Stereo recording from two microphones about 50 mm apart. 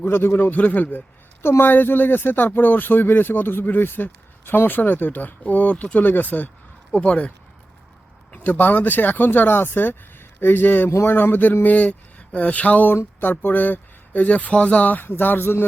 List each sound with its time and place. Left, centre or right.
0.0 s speech: left
0.3 s speech: left
1.4 s speech: left
11.6 s speech: left
13.0 s speech: left
15.0 s speech: left